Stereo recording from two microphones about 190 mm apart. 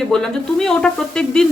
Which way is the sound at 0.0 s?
Centre (ahead or behind).